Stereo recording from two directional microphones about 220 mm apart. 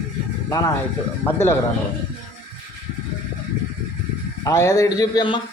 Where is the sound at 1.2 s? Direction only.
10° left (ahead or behind).